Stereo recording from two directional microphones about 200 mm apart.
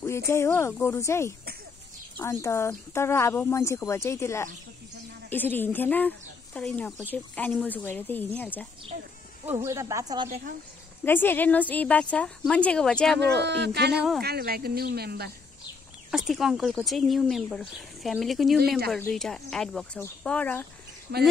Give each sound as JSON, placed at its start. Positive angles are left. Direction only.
{"t": 0.3, "sound": "speech", "side_deg": 15}
{"t": 9.5, "sound": "speech", "side_deg": -15}
{"t": 10.2, "sound": "speech", "side_deg": -40}
{"t": 11.1, "sound": "speech", "side_deg": 10}
{"t": 13.2, "sound": "speech", "side_deg": -60}
{"t": 16.1, "sound": "speech", "side_deg": 0}
{"t": 21.1, "sound": "speech", "side_deg": -55}